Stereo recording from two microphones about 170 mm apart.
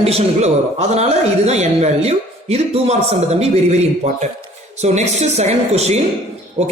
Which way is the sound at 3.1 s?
40° right (ahead or behind).